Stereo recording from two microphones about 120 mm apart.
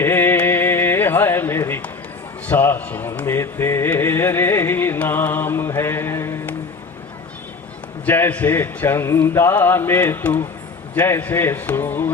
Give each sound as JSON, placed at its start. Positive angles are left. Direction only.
{"t": 0.0, "sound": "a sound", "side_deg": 20}
{"t": 2.5, "sound": "speech", "side_deg": 15}
{"t": 8.0, "sound": "a man's voice", "side_deg": 15}